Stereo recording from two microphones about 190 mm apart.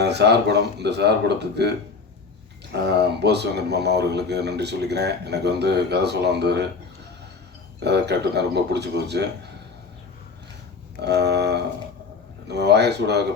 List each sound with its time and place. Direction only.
0.0 s speech: 60° right (ahead or behind)
2.7 s speech: 60° right (ahead or behind)
7.9 s speech: 60° right (ahead or behind)
11.0 s speech: 60° right (ahead or behind)